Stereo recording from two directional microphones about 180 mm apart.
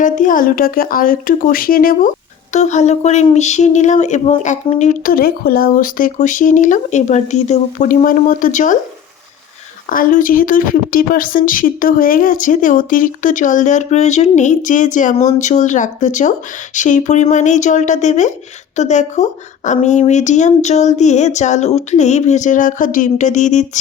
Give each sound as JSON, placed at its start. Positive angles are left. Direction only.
{"t": 0.0, "sound": "speech", "side_deg": 45}
{"t": 9.9, "sound": "speech", "side_deg": 50}